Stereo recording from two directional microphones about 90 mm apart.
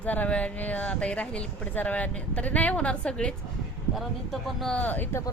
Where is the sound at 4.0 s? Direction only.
Centre (ahead or behind).